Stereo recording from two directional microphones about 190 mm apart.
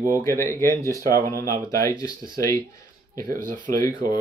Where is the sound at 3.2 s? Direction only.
45° right (ahead or behind).